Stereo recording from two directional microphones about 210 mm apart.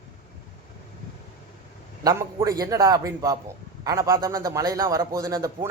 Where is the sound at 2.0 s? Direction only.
15° right (ahead or behind).